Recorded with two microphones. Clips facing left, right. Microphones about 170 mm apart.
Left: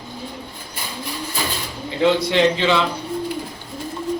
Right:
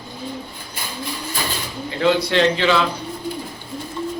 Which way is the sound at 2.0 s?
15° left (ahead or behind).